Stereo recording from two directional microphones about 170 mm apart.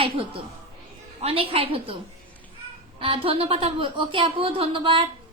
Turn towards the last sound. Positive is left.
turn(degrees=-30)  # may be behind; listen again after turning